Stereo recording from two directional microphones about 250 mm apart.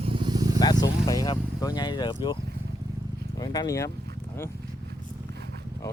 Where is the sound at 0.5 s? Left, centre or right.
Centre.